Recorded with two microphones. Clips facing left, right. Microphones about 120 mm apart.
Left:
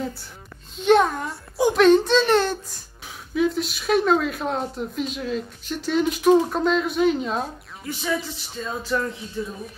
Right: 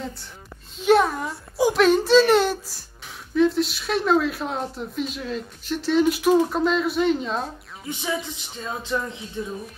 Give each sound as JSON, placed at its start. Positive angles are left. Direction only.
{"t": 0.7, "sound": "speech", "side_deg": 0}
{"t": 7.8, "sound": "music", "side_deg": -15}
{"t": 8.6, "sound": "speech", "side_deg": -20}